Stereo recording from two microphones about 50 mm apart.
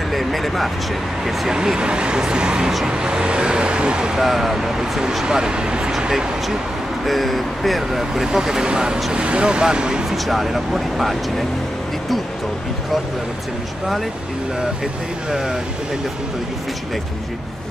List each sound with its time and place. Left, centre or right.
0.1 s a sound: centre
1.2 s speech: centre
1.6 s speech: centre
7.1 s speech: centre
10.0 s speech: centre